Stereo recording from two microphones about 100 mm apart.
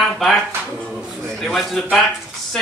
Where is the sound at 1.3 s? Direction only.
Centre (ahead or behind).